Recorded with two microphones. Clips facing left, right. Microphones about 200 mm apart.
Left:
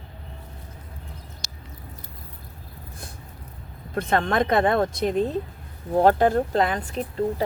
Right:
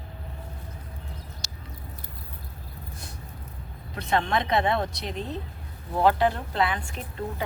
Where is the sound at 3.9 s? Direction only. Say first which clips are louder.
Left 3 dB; 50° left (ahead or behind).